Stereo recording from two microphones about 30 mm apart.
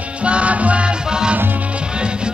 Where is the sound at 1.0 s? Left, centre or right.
Right.